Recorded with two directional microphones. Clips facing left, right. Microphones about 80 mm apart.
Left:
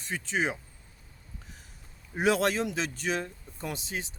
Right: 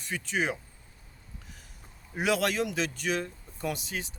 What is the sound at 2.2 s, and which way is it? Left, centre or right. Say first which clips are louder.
Speech: left 2 dB; left.